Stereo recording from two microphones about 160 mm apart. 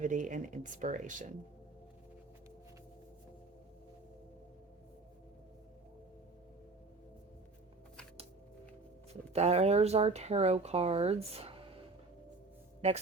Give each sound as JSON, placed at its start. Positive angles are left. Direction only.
{"t": 0.0, "sound": "speech", "side_deg": -55}
{"t": 9.3, "sound": "speech", "side_deg": -40}